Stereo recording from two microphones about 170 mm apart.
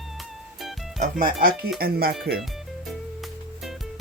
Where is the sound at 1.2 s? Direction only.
60° right (ahead or behind).